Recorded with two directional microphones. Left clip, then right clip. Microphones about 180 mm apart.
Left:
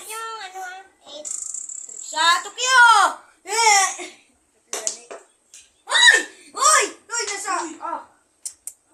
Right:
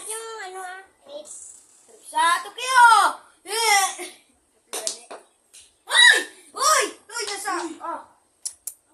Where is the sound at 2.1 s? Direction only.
35° left (ahead or behind).